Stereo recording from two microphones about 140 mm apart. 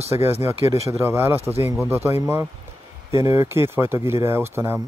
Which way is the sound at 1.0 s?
15° right (ahead or behind).